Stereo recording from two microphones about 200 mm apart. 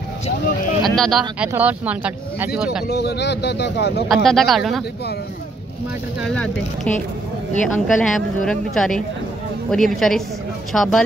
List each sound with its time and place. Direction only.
0.8 s speech: centre (ahead or behind)
2.9 s speech: 55° left (ahead or behind)
4.1 s speech: centre (ahead or behind)
6.2 s speech: 5° left (ahead or behind)